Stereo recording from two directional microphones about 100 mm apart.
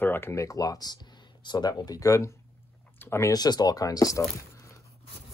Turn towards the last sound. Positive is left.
turn(degrees=35)  # may be behind; listen again after turning